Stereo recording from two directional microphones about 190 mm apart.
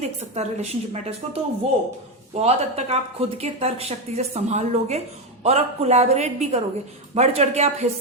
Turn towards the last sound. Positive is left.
turn(degrees=-35)  # may be behind; listen again after turning